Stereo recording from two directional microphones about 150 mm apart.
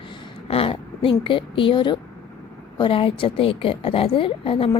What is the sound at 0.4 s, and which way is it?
A woman's voice, 40° left (ahead or behind).